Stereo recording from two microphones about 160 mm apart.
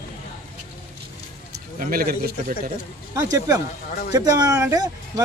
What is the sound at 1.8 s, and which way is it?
Speech, 70° right (ahead or behind).